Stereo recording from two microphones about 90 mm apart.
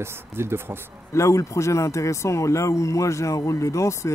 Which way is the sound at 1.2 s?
35° left (ahead or behind).